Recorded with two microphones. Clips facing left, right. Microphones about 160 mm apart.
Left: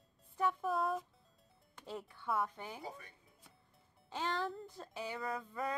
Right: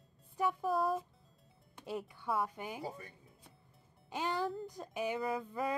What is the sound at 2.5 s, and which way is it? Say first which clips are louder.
Speech: right 4 dB; 15° right (ahead or behind).